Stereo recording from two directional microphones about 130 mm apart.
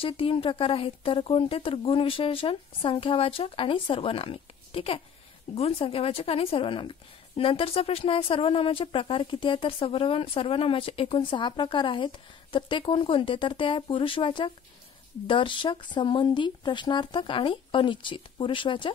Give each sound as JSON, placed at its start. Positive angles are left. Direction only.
{"t": 0.0, "sound": "speech", "side_deg": 45}